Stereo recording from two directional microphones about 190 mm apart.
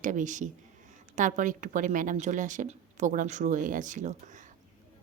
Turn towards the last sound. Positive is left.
turn(degrees=-40)  # may be behind; listen again after turning